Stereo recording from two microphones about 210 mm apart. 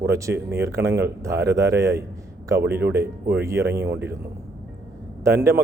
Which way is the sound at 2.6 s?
50° right (ahead or behind).